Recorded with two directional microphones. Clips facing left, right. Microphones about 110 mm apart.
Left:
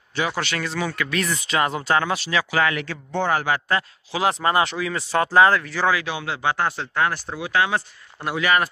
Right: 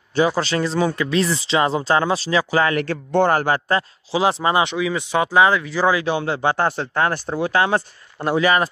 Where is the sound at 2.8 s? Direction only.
60° right (ahead or behind).